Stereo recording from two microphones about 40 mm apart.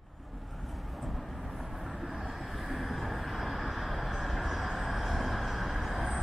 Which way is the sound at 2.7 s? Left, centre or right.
Centre.